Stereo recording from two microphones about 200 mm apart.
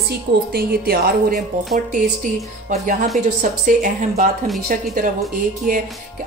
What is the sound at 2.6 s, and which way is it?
A woman's voice, 40° right (ahead or behind).